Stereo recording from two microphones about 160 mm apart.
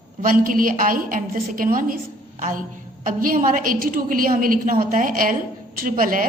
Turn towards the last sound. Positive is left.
turn(degrees=-60)  # may be behind; listen again after turning